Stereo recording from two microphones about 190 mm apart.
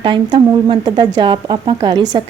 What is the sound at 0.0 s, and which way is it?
A woman's voice, 25° right (ahead or behind).